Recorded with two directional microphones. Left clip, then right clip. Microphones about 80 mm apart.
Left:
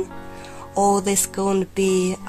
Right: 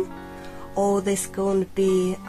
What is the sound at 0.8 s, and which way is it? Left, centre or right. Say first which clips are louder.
Speech: left 4 dB; left.